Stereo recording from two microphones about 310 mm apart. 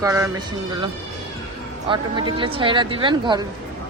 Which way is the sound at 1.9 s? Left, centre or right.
Centre.